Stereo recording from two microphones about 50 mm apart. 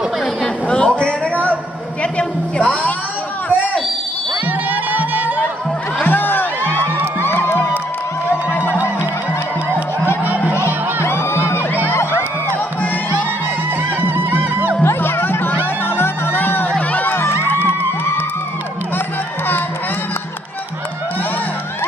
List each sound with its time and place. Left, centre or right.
0.7 s a sound: left
2.1 s music: left
4.5 s music: right
6.0 s music: left
7.2 s crowd: left
8.5 s music: left
10.2 s a sound: right
10.6 s music: left
14.3 s music: right
14.8 s music: left
16.9 s crowd: left